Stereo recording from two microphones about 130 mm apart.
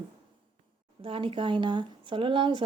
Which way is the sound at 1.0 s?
45° right (ahead or behind).